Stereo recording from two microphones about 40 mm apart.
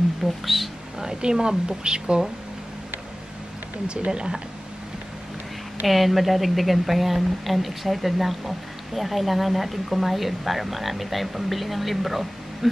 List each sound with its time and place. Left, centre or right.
0.2 s speech: centre
4.1 s speech: right
5.9 s a woman's voice: centre